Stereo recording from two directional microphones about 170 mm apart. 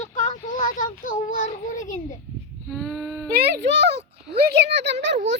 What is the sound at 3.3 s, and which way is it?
Speech, 80° right.